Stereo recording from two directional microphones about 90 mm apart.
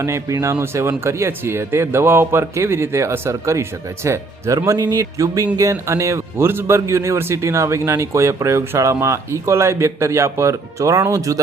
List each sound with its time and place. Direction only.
0.0 s speech: 35° right (ahead or behind)